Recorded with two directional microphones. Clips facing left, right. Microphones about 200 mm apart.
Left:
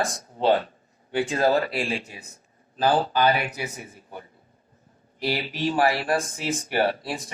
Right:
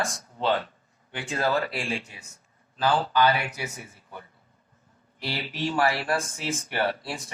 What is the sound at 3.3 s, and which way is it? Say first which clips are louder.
Speech: left 3 dB; 20° left (ahead or behind).